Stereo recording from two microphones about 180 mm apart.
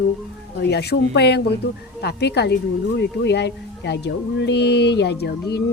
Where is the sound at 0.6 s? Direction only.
65° left (ahead or behind).